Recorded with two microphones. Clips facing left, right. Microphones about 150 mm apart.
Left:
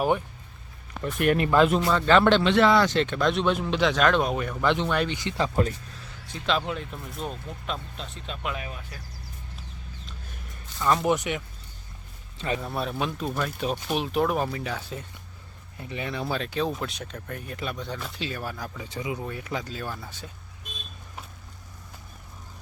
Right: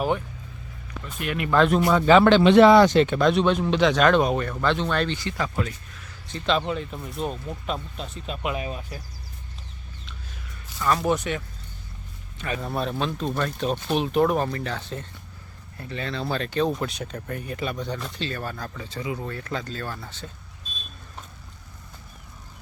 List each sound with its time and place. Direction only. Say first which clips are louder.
1.5 s speech: right 3 dB; 5° left (ahead or behind)
1.9 s speech: right 3 dB; 10° right (ahead or behind)
2.4 s speech: right 6 dB; 15° right (ahead or behind)
4.4 s speech: even; 15° left (ahead or behind)
6.3 s speech: right 3 dB; centre (ahead or behind)
8.5 s speech: right 6 dB; 25° right (ahead or behind)
10.8 s speech: even; 20° left (ahead or behind)
12.5 s speech: right 5 dB; centre (ahead or behind)
16.2 s speech: right 4 dB; centre (ahead or behind)